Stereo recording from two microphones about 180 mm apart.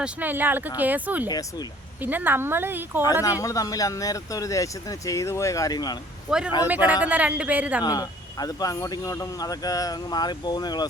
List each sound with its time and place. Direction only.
0.0 s speech: 10° right (ahead or behind)
1.3 s speech: 20° left (ahead or behind)
2.0 s speech: 10° right (ahead or behind)
3.4 s speech: 20° left (ahead or behind)
6.3 s a man's voice: 5° right (ahead or behind)
7.9 s speech: 20° left (ahead or behind)